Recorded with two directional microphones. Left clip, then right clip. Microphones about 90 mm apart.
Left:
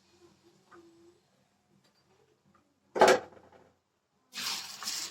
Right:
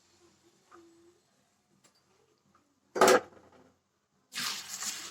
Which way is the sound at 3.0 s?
35° right (ahead or behind).